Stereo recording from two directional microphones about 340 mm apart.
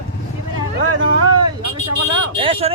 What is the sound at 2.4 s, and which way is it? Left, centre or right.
Speech, centre.